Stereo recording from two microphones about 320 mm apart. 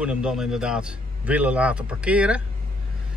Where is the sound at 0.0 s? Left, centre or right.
Centre.